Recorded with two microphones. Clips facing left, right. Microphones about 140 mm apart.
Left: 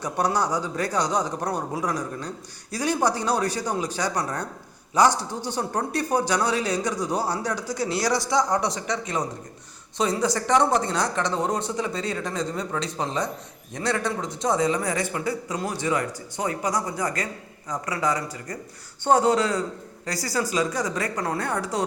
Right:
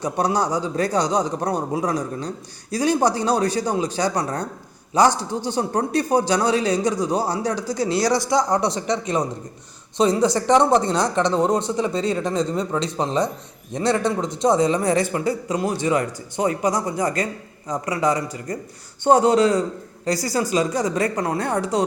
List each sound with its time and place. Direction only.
0.0 s a man's voice: 20° right (ahead or behind)
5.5 s a man's voice: 25° right (ahead or behind)